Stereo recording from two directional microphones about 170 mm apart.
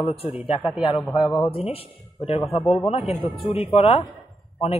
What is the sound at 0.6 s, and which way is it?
Speech, centre (ahead or behind).